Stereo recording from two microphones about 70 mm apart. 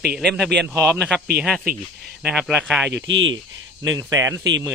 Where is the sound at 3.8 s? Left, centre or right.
Right.